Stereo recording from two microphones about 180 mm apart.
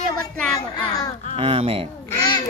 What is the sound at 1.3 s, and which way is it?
Speech, 35° right (ahead or behind).